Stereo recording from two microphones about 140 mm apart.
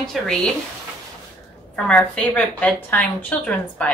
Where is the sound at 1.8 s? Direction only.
10° left (ahead or behind).